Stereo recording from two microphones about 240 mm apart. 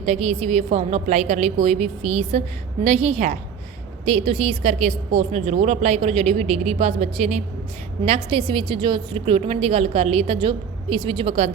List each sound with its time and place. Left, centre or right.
0.0 s a woman's voice: right